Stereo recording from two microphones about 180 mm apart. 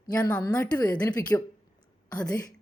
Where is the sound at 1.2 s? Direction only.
20° left (ahead or behind).